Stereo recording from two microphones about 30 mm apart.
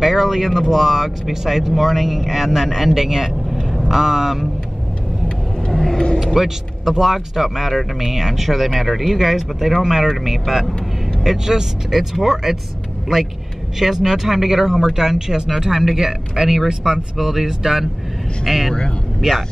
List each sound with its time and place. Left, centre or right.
0.0 s a sound: centre
0.6 s speech: centre
5.7 s vehicle: centre
6.1 s speech: centre
13.7 s speech: centre